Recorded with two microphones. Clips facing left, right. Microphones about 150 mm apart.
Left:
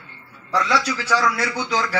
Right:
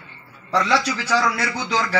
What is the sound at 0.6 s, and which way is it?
Speech, centre (ahead or behind).